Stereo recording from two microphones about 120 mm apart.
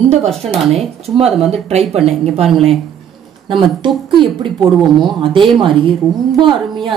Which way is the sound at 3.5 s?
45° right (ahead or behind).